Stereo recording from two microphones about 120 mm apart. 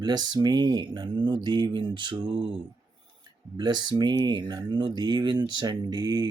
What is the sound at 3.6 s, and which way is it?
Speech, 35° right (ahead or behind).